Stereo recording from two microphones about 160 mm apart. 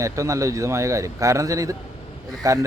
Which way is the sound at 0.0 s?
20° right (ahead or behind).